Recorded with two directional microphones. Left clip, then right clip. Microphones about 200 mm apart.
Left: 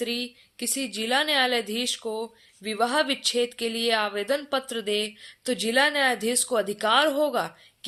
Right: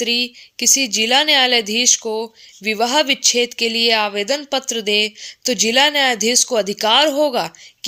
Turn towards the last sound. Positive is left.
turn(degrees=-35)  # may be behind; listen again after turning